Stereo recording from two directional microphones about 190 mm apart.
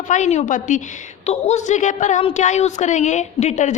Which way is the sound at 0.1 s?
40° left (ahead or behind).